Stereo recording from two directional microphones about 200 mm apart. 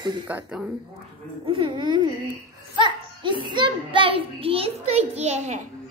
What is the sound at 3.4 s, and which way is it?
A child's voice, 25° right (ahead or behind).